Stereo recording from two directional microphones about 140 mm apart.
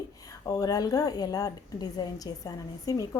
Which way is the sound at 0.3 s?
25° left (ahead or behind).